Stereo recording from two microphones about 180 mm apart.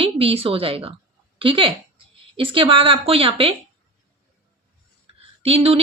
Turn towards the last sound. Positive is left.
turn(degrees=-35)  # may be behind; listen again after turning